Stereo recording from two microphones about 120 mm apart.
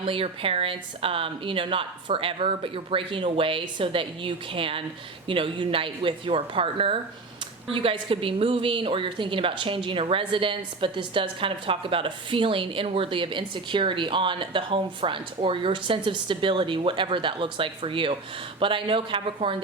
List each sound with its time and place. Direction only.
0.0 s a woman's voice: 50° right (ahead or behind)